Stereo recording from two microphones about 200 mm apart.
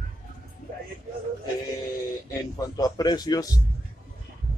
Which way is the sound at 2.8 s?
20° left (ahead or behind).